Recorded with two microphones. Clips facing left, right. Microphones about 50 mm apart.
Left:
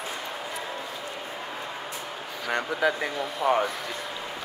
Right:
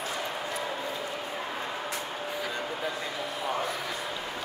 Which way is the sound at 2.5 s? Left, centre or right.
Left.